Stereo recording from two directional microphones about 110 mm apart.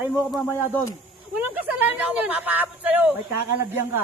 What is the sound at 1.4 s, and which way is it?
A man's voice, 15° right (ahead or behind).